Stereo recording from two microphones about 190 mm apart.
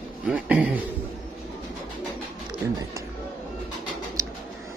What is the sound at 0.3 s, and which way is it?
Speech, 5° right (ahead or behind).